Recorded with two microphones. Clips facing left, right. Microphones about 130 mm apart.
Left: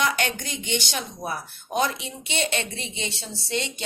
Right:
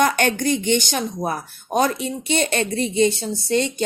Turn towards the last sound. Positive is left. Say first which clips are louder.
# right 9 dB
turn(degrees=-45)  # may be behind; listen again after turning